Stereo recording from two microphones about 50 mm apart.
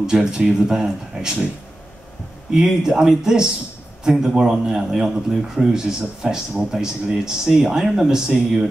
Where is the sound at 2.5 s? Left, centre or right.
Centre.